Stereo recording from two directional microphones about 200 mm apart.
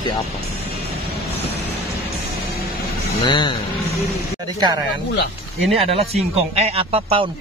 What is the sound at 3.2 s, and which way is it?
Speech, 25° left (ahead or behind).